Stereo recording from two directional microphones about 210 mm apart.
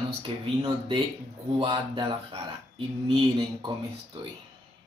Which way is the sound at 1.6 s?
25° right (ahead or behind).